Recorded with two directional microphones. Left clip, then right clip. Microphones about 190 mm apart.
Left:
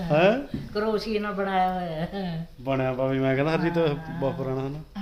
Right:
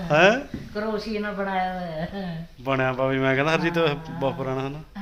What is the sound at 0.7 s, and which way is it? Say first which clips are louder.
Speech: left 2 dB; 30° left (ahead or behind).